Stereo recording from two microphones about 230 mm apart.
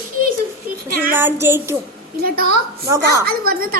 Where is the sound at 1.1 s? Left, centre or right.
Centre.